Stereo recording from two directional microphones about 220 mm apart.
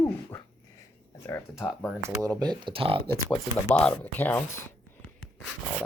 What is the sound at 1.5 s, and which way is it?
Speech, centre (ahead or behind).